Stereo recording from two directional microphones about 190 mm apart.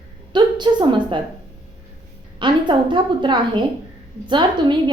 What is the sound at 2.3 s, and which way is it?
A woman's voice, 25° right (ahead or behind).